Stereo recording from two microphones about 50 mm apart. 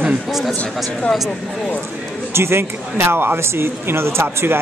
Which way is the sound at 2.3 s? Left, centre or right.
Right.